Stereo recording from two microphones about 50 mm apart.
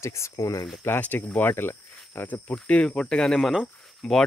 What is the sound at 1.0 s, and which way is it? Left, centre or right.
Speech, left.